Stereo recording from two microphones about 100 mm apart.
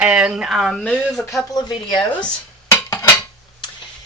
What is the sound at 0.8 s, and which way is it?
Speech, 10° left (ahead or behind).